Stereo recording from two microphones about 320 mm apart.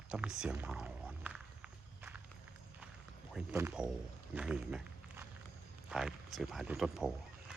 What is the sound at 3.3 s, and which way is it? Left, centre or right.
Speech, centre.